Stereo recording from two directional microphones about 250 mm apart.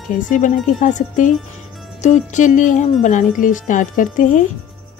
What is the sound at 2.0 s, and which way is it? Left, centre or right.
Speech, left.